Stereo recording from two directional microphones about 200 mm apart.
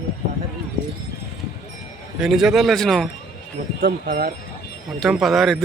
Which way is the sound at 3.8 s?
50° right (ahead or behind).